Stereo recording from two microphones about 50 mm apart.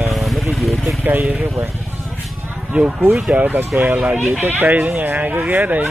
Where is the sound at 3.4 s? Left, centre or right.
Right.